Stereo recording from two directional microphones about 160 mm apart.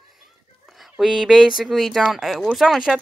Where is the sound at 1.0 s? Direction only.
Centre (ahead or behind).